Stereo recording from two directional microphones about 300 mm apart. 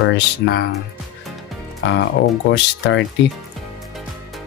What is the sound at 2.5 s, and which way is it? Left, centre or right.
Speech, left.